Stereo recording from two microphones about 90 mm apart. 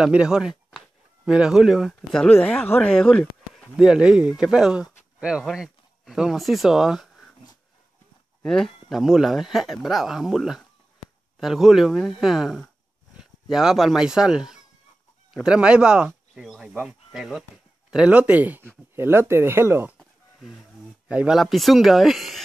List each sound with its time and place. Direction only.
0.0 s speech: 10° right (ahead or behind)
2.0 s speech: 10° left (ahead or behind)
3.7 s speech: 10° right (ahead or behind)
8.5 s speech: 5° left (ahead or behind); by 20.0 s 25° right (ahead or behind)
21.1 s speech: 15° right (ahead or behind)
21.4 s speech: centre (ahead or behind)